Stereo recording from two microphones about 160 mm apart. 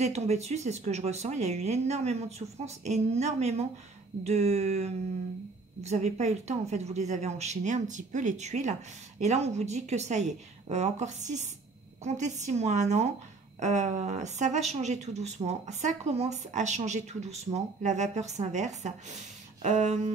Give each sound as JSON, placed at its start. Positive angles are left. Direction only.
{"t": 0.0, "sound": "a woman's voice", "side_deg": -45}